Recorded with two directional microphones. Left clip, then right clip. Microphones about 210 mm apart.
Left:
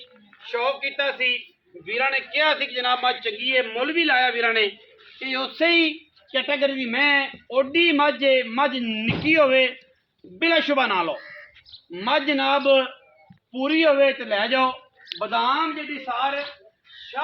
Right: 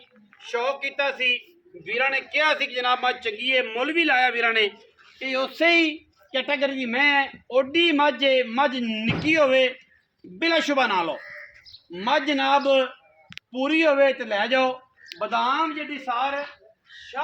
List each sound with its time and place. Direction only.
0.4 s a man's voice: 25° right (ahead or behind)